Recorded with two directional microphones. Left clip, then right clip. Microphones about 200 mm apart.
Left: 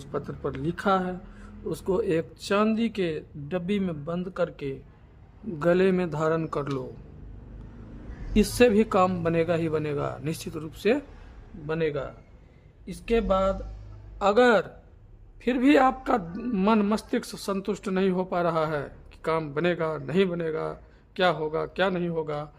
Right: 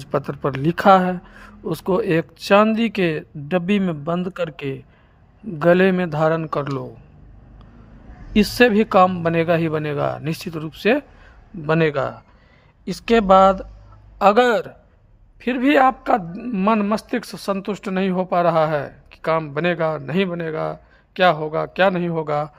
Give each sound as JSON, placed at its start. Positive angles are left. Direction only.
{"t": 0.0, "sound": "a man's voice", "side_deg": -35}
{"t": 8.3, "sound": "a man's voice", "side_deg": -20}
{"t": 11.6, "sound": "speech", "side_deg": -45}
{"t": 14.2, "sound": "a man's voice", "side_deg": -30}